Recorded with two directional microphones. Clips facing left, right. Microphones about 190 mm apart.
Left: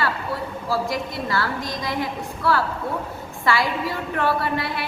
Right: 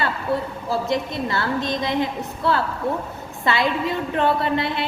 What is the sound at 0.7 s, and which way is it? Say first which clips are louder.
A woman's voice: right 2 dB; 20° right (ahead or behind).